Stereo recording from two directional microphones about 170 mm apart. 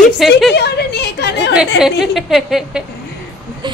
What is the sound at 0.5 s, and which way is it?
A woman's voice, 75° left (ahead or behind).